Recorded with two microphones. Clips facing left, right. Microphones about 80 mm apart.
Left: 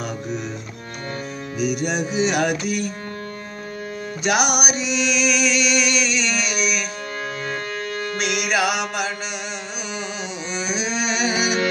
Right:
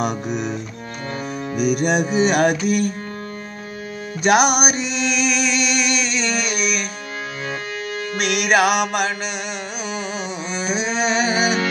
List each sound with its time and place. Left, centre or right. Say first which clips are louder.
1.6 s music: right 4 dB; right
4.2 s music: right 5 dB; right
8.2 s music: right 5 dB; right
10.5 s carnatic music: right 2 dB; right